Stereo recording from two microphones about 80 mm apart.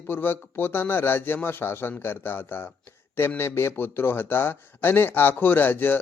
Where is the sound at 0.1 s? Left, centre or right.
Left.